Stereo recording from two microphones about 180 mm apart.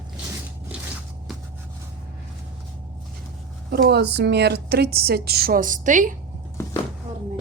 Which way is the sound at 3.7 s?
60° right (ahead or behind).